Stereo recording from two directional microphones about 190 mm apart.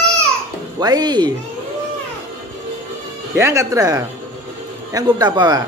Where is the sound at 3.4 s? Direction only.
15° right (ahead or behind).